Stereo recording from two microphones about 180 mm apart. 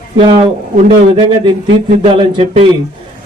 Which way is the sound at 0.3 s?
30° right (ahead or behind).